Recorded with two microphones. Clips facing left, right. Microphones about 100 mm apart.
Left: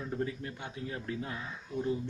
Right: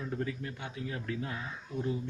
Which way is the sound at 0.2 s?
30° left (ahead or behind).